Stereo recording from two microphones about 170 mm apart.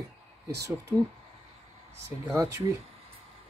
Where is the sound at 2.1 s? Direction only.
15° right (ahead or behind).